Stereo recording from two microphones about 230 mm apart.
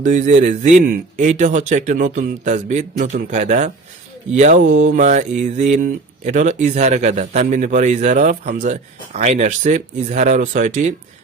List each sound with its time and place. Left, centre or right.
0.0 s mantra: right